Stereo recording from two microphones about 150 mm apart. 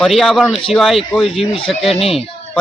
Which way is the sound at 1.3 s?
40° left (ahead or behind).